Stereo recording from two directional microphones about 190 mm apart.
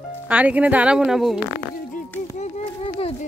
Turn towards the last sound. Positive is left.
turn(degrees=30)  # may be behind; listen again after turning